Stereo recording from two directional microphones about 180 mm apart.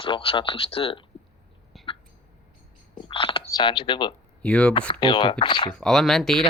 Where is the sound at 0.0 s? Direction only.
30° left (ahead or behind).